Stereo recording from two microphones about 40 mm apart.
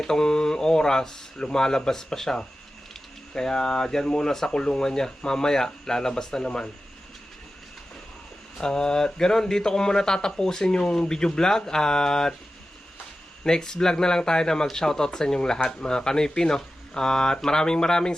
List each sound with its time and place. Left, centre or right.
0.0 s speech: centre
8.5 s speech: centre
13.4 s speech: centre